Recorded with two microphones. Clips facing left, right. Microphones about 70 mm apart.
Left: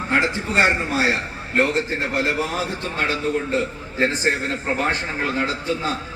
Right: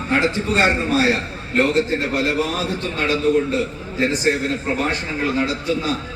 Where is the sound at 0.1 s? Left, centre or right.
Left.